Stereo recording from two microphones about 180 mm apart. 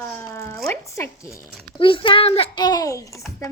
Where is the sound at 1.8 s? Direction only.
30° left (ahead or behind).